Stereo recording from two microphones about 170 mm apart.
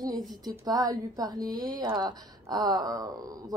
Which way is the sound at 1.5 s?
55° right (ahead or behind).